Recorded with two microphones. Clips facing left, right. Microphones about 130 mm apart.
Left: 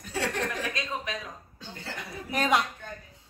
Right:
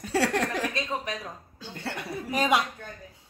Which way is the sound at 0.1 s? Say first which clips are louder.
Right 5 dB; 75° right (ahead or behind).